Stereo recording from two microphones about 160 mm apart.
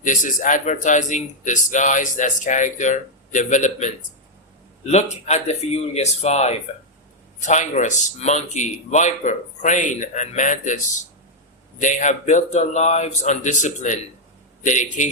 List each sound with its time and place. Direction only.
0.0 s speech: 55° left (ahead or behind)
11.8 s speech: 50° left (ahead or behind)